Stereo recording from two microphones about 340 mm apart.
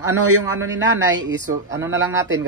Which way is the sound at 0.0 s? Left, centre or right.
Right.